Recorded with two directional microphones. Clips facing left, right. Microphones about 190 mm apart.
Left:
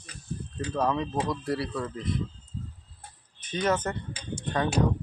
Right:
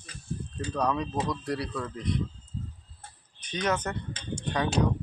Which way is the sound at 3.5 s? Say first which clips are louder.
Left 2 dB; 5° left (ahead or behind).